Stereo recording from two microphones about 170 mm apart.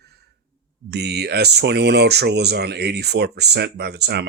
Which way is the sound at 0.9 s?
75° right (ahead or behind).